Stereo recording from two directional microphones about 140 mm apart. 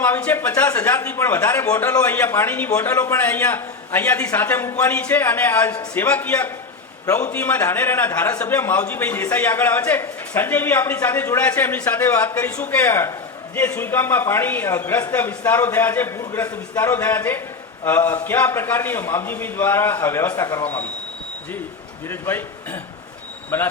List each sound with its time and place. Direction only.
0.0 s a man's voice: 15° left (ahead or behind)
22.1 s a man's voice: 15° left (ahead or behind)